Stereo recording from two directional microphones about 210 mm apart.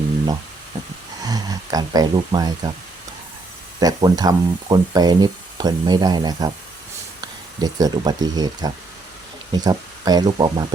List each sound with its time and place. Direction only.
1.2 s speech: 20° right (ahead or behind)
3.8 s speech: 20° right (ahead or behind)
7.6 s speech: 20° right (ahead or behind)